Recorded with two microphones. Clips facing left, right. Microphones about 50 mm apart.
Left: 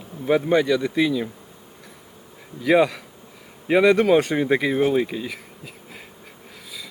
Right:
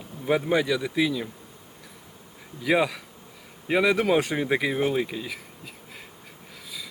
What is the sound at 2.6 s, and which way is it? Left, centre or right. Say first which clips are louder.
Speech: left 5 dB; centre.